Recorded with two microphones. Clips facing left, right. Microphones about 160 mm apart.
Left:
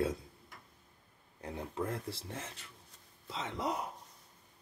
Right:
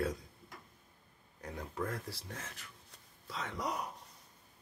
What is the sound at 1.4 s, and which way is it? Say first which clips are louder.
Speech: left 2 dB; 25° left (ahead or behind).